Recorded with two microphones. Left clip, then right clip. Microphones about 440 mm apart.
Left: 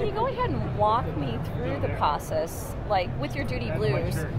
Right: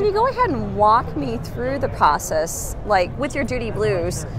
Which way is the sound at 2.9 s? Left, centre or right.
Right.